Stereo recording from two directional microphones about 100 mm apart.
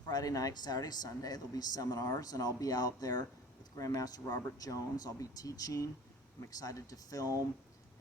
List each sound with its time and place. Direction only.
0.1 s speech: 40° left (ahead or behind)